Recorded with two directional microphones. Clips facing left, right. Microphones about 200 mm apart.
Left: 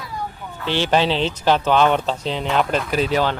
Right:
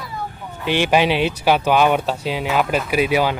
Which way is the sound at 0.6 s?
15° right (ahead or behind).